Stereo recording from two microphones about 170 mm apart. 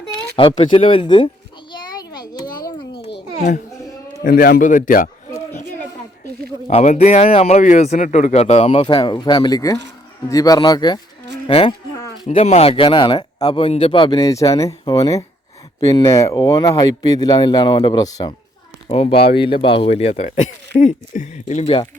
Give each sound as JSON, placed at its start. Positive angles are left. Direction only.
{"t": 0.1, "sound": "speech", "side_deg": 25}
{"t": 1.7, "sound": "a sound", "side_deg": 25}
{"t": 4.2, "sound": "speech", "side_deg": 60}
{"t": 6.7, "sound": "speech", "side_deg": 40}
{"t": 11.4, "sound": "insect", "side_deg": 30}
{"t": 12.3, "sound": "speech", "side_deg": 40}
{"t": 15.8, "sound": "speech", "side_deg": 20}
{"t": 18.9, "sound": "speech", "side_deg": 35}